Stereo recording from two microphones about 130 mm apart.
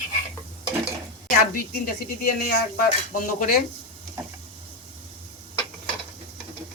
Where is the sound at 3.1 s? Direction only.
90° left.